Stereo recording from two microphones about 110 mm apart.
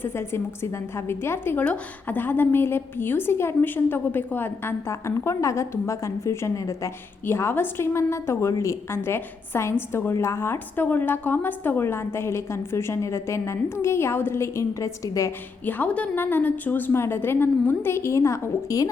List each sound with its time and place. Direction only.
0.0 s a woman's voice: 20° left (ahead or behind)
15.6 s a woman's voice: 15° left (ahead or behind); by 18.9 s 30° left (ahead or behind)